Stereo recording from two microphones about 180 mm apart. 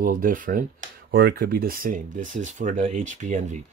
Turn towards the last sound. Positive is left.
turn(degrees=-45)  # may be behind; listen again after turning